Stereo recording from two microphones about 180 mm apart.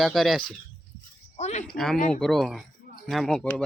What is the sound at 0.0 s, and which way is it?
Speech, centre (ahead or behind).